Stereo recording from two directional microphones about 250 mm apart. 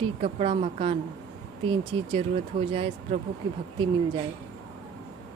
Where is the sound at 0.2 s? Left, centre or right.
Right.